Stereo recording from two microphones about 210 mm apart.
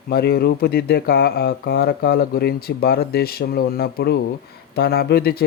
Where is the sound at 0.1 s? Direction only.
50° left (ahead or behind).